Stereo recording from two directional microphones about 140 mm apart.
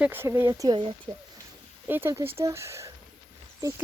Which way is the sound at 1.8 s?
15° right (ahead or behind).